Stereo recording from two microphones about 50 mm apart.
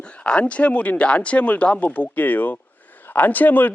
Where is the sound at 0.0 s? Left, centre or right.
Left.